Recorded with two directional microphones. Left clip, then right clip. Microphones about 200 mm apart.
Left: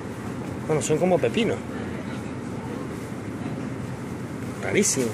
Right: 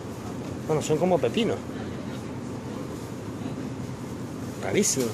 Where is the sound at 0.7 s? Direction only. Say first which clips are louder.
Left 2 dB; 5° left (ahead or behind).